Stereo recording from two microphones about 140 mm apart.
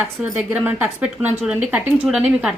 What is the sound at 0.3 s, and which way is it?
A woman's voice, 10° right (ahead or behind).